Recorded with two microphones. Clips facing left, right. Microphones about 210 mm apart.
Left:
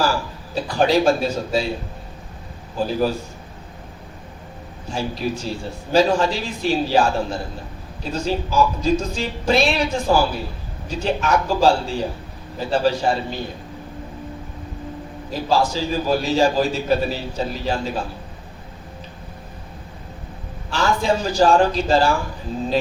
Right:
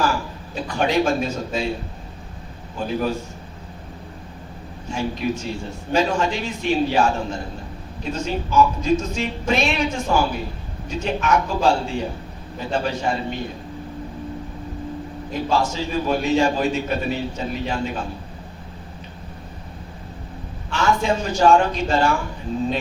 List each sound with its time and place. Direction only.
0.5 s a man's voice: 35° left (ahead or behind)
2.7 s a man's voice: 35° left (ahead or behind)
4.9 s a man's voice: 35° left (ahead or behind)
15.3 s a man's voice: 35° left (ahead or behind)
20.7 s a man's voice: 35° left (ahead or behind)